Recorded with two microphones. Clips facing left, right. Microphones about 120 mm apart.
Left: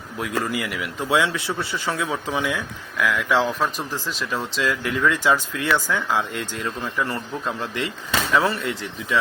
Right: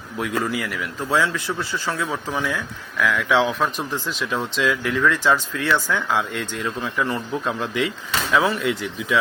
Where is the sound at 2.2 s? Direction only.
10° left (ahead or behind).